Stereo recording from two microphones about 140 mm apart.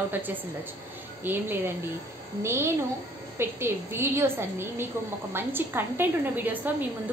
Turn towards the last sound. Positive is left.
turn(degrees=-15)  # may be behind; listen again after turning